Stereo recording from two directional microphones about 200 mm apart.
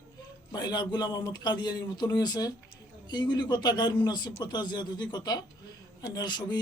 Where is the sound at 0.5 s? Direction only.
20° left (ahead or behind).